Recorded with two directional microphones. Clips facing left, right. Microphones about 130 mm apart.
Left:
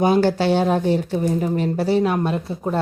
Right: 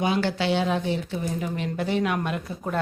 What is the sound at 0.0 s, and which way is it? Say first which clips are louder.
Speech: left 7 dB; 40° left (ahead or behind).